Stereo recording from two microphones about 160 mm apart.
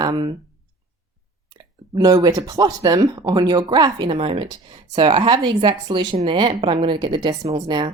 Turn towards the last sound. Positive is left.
turn(degrees=-30)  # may be behind; listen again after turning